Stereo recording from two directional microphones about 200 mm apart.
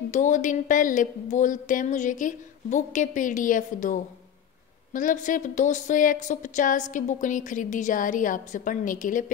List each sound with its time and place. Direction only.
0.1 s a woman's voice: 40° left (ahead or behind)